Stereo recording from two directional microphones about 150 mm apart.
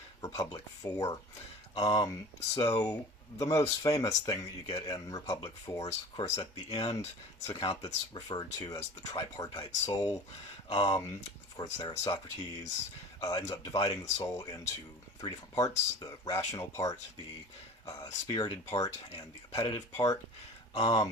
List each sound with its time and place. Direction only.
0.2 s speech: 25° left (ahead or behind)